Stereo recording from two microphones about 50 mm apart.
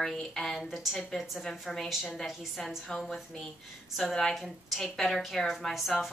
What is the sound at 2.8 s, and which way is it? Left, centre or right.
Speech, centre.